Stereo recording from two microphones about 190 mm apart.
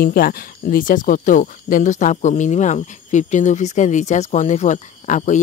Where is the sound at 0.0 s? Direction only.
50° left (ahead or behind).